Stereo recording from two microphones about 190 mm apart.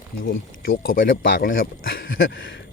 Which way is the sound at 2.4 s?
70° left (ahead or behind).